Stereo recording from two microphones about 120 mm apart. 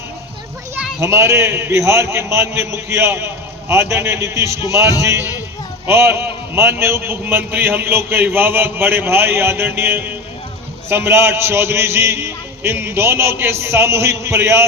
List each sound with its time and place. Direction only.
1.0 s a man's voice: 20° right (ahead or behind)